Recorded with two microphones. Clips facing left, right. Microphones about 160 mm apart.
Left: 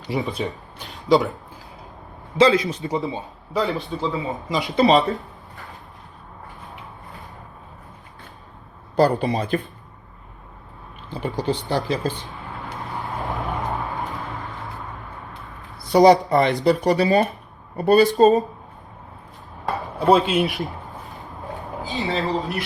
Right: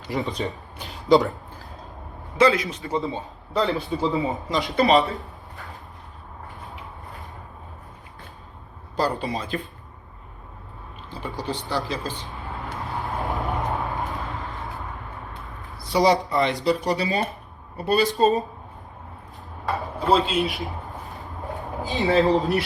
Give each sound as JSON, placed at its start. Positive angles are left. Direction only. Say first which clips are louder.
{"t": 0.3, "sound": "speech", "louder": "left 1 dB", "side_deg": 5}
{"t": 2.4, "sound": "speech", "louder": "left 3 dB", "side_deg": 25}
{"t": 3.5, "sound": "a man's voice", "louder": "even", "side_deg": 0}
{"t": 4.6, "sound": "speech", "louder": "left 2 dB", "side_deg": 20}
{"t": 9.0, "sound": "speech", "louder": "left 7 dB", "side_deg": 55}
{"t": 11.2, "sound": "speech", "louder": "left 6 dB", "side_deg": 65}
{"t": 11.9, "sound": "speech", "louder": "left 6 dB", "side_deg": 55}
{"t": 12.9, "sound": "vehicle", "louder": "right 1 dB", "side_deg": 0}
{"t": 15.9, "sound": "speech", "louder": "left 6 dB", "side_deg": 50}
{"t": 20.1, "sound": "speech", "louder": "left 4 dB", "side_deg": 55}
{"t": 20.4, "sound": "a sound", "louder": "left 3 dB", "side_deg": 0}
{"t": 22.2, "sound": "a man's voice", "louder": "right 5 dB", "side_deg": 0}